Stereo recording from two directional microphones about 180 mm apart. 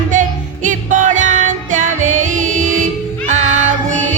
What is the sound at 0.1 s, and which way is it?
Music, 45° right (ahead or behind).